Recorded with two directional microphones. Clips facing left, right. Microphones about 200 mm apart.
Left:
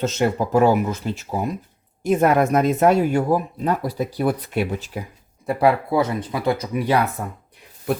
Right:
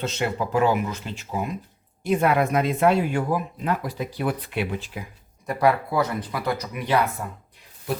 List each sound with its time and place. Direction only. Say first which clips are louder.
0.0 s speech: left 5 dB; 45° left (ahead or behind)
5.5 s speech: left 3 dB; 30° left (ahead or behind)
7.2 s speech: left 3 dB; 50° left (ahead or behind)